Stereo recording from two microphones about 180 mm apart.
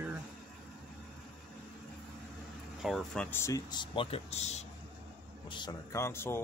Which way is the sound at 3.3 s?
15° left (ahead or behind).